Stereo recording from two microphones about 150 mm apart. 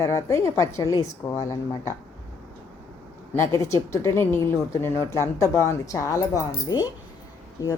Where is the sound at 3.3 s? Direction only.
20° left (ahead or behind).